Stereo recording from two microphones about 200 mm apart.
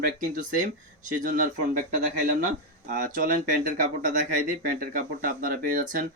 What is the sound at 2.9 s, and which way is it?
Speech, 40° right (ahead or behind).